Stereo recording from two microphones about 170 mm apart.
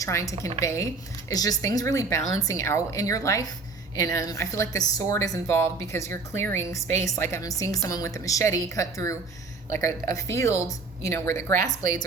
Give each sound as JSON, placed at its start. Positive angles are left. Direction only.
{"t": 0.0, "sound": "a woman's voice", "side_deg": 20}